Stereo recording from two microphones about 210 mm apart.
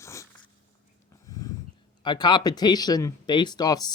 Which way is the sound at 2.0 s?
20° left (ahead or behind).